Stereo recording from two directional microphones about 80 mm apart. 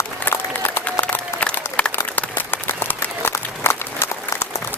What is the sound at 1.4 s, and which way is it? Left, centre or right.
Applause, centre.